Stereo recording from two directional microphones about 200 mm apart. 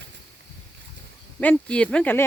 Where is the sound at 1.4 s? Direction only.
5° left (ahead or behind).